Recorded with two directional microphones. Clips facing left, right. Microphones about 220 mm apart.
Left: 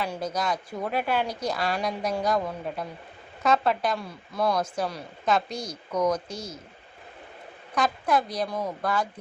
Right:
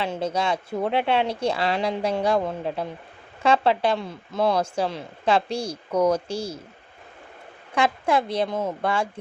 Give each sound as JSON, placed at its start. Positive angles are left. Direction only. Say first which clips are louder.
{"t": 0.0, "sound": "speech", "louder": "right 4 dB", "side_deg": -25}
{"t": 7.8, "sound": "speech", "louder": "right 3 dB", "side_deg": -25}